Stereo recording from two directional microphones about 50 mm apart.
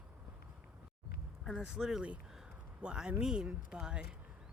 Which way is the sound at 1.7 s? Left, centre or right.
Centre.